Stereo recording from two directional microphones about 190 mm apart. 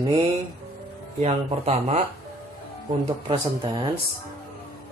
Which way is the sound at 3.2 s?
25° right (ahead or behind).